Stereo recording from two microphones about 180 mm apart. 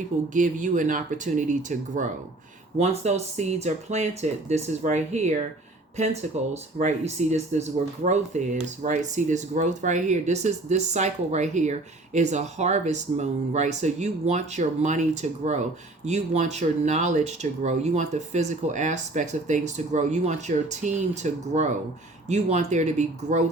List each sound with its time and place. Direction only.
0.3 s speech: 45° right (ahead or behind)
2.7 s speech: 35° right (ahead or behind)